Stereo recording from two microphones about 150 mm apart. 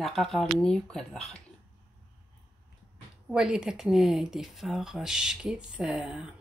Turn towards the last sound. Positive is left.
turn(degrees=-5)  # may be behind; listen again after turning